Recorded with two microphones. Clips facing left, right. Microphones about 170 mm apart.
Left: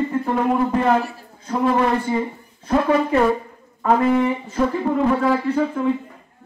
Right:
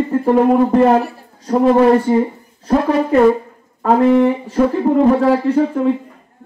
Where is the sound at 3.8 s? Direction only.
35° right (ahead or behind).